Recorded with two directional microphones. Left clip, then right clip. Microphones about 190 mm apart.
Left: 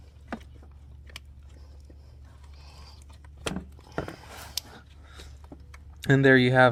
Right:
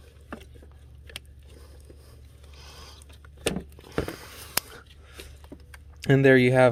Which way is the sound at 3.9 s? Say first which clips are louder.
Right 4 dB; 50° right (ahead or behind).